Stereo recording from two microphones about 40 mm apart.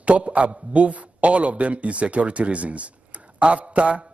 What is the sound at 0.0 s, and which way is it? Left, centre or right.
A man's voice, right.